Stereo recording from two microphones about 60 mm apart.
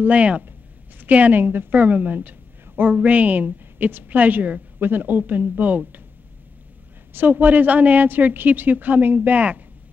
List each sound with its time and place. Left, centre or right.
0.0 s a woman's voice: right
7.2 s a woman's voice: right